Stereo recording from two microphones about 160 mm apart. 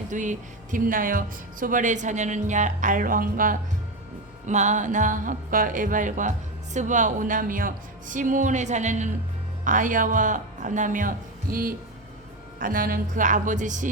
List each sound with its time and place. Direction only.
0.1 s speech: 50° right (ahead or behind)
4.4 s a woman's voice: 50° right (ahead or behind)
11.5 s a woman's voice: 65° right (ahead or behind)